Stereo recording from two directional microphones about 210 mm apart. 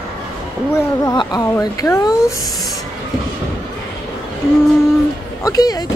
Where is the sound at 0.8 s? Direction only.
15° left (ahead or behind).